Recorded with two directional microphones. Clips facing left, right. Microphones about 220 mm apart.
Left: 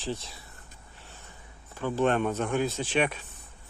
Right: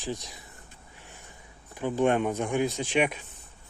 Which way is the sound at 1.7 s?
15° right (ahead or behind).